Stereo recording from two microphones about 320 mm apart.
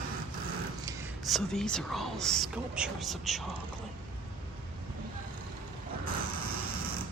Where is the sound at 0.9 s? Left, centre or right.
Centre.